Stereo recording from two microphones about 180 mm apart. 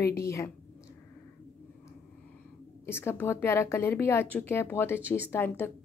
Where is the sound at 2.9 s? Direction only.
15° left (ahead or behind).